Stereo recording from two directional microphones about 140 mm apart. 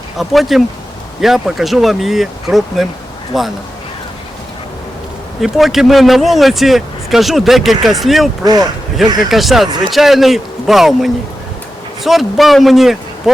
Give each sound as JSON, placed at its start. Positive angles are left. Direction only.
{"t": 0.2, "sound": "speech", "side_deg": 0}
{"t": 5.4, "sound": "speech", "side_deg": 0}
{"t": 8.4, "sound": "speech", "side_deg": -30}
{"t": 9.3, "sound": "speech", "side_deg": 0}